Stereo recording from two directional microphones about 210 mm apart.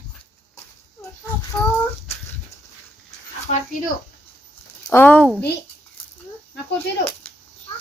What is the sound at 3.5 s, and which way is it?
Speech, 30° left (ahead or behind).